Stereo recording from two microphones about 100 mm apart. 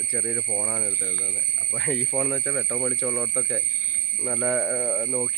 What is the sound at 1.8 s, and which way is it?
Speech, 5° left (ahead or behind).